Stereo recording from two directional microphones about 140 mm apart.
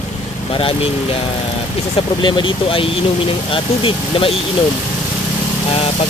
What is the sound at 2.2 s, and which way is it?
Speech, 35° left (ahead or behind).